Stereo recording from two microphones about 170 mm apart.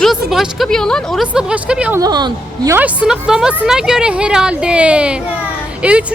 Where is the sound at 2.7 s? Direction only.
10° right (ahead or behind).